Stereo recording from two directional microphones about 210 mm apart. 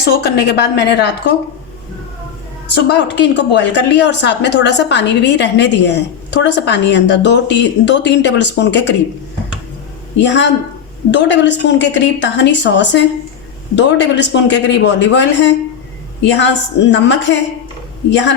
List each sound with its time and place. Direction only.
0.0 s a woman's voice: 50° left (ahead or behind)
2.7 s a woman's voice: 55° left (ahead or behind)
10.2 s a woman's voice: 55° left (ahead or behind)